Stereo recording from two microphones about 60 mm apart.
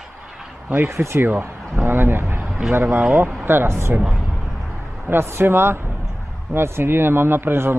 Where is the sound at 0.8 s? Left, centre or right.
Right.